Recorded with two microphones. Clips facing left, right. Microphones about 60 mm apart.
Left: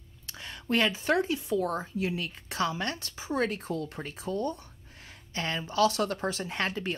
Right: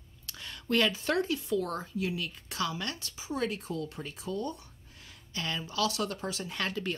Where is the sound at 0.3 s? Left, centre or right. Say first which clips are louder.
Left 1 dB; left.